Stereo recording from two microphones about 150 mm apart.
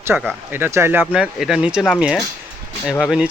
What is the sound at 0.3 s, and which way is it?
Speech, 15° right (ahead or behind).